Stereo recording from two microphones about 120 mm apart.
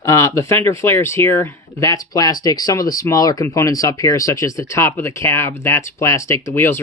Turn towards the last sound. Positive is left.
turn(degrees=20)  # may be behind; listen again after turning